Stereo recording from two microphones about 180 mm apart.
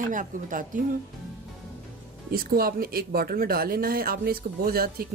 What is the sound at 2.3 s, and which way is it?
Speech, 55° right (ahead or behind).